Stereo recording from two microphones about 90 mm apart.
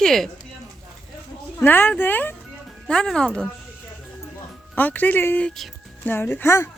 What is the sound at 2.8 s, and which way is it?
Speech, 10° left (ahead or behind).